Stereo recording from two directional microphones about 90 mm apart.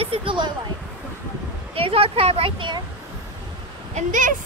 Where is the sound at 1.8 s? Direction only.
90° right.